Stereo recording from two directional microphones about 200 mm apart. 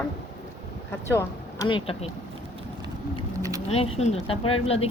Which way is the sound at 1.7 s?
25° left (ahead or behind).